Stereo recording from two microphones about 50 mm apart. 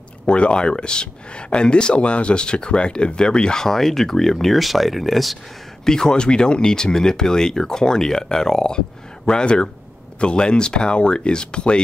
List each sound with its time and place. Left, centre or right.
0.3 s speech: left; by 5.4 s centre
5.9 s speech: centre